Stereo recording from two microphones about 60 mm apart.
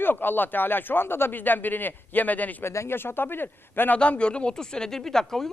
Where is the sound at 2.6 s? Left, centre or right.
Left.